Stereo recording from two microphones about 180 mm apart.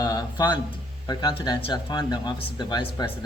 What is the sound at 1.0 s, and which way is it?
Speech, 20° left (ahead or behind).